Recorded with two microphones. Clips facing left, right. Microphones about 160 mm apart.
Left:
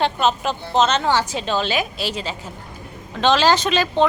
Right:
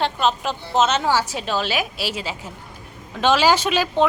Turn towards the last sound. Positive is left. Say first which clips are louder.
# left 1 dB
turn(degrees=-10)  # may be behind; listen again after turning